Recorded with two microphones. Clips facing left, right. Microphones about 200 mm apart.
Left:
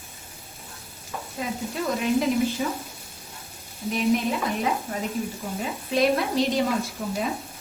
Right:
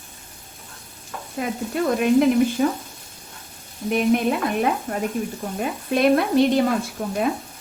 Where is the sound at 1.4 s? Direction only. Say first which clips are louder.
Right 5 dB; 60° right (ahead or behind).